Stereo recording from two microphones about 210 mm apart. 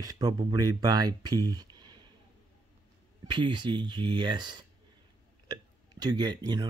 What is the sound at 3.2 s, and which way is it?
Speech, 20° right (ahead or behind).